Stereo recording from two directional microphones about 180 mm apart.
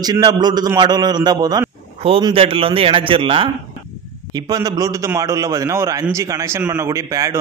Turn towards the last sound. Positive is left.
turn(degrees=-20)  # may be behind; listen again after turning